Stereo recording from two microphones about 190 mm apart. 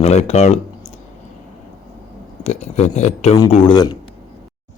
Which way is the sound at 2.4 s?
35° left (ahead or behind).